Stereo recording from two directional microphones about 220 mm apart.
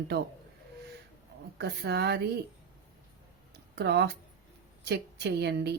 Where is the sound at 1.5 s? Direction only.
50° right (ahead or behind).